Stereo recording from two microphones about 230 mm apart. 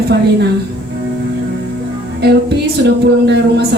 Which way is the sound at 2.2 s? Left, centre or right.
Right.